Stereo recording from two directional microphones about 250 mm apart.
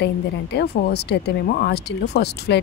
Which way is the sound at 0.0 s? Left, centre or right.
Left.